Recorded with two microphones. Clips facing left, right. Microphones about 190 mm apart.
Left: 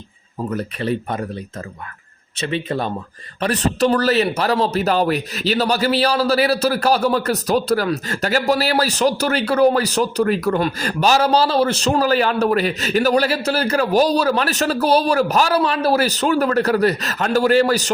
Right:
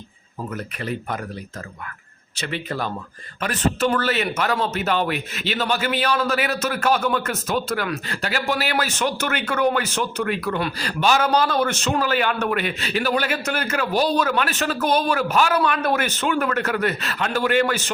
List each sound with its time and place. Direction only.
0.5 s speech: 30° left (ahead or behind)
2.5 s speech: 25° left (ahead or behind)
3.4 s speech: 35° left (ahead or behind)